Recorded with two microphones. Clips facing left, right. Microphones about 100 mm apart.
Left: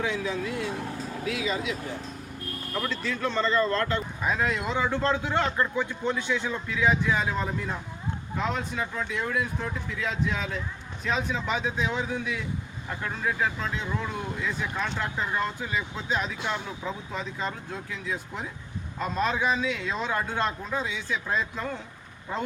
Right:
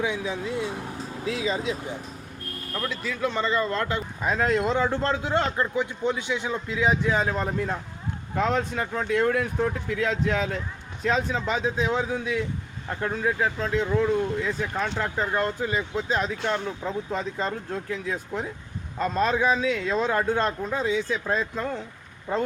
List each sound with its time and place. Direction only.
0.0 s a man's voice: 20° right (ahead or behind)
2.9 s a man's voice: 5° right (ahead or behind)
4.3 s a man's voice: 40° right (ahead or behind)
5.7 s a man's voice: 20° right (ahead or behind)
8.4 s speech: 70° right (ahead or behind)
8.7 s speech: 45° right (ahead or behind)
9.0 s speech: 65° right (ahead or behind)
11.0 s a man's voice: 40° right (ahead or behind)